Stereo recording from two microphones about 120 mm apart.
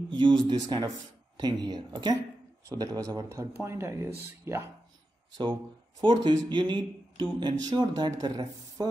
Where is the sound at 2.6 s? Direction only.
30° right (ahead or behind).